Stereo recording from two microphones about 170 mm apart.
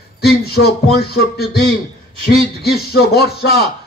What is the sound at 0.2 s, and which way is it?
A man's voice, 70° left (ahead or behind).